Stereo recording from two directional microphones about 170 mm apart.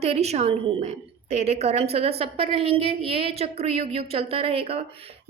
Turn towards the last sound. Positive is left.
turn(degrees=-35)  # may be behind; listen again after turning